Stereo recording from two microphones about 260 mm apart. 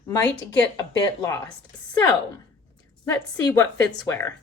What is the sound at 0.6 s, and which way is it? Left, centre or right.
Speech, centre.